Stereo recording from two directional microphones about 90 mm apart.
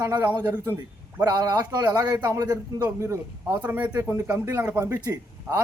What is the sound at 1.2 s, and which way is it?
A man's voice, 45° right (ahead or behind).